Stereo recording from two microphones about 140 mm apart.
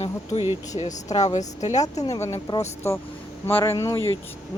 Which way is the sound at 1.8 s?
25° left (ahead or behind).